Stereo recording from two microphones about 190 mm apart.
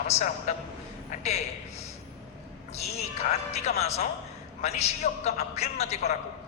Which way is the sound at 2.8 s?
35° left (ahead or behind).